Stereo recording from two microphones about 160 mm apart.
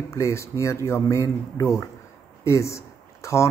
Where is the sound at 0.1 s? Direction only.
15° left (ahead or behind).